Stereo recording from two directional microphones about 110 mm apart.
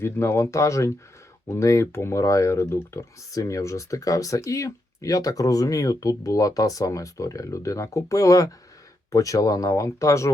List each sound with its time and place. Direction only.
0.0 s speech: 25° left (ahead or behind)